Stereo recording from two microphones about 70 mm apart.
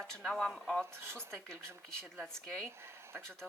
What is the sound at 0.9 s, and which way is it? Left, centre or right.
Speech, right.